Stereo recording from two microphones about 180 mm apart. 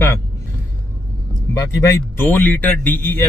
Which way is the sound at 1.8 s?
15° left (ahead or behind).